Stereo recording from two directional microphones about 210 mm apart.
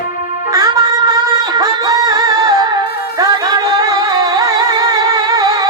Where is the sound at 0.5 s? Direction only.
15° right (ahead or behind).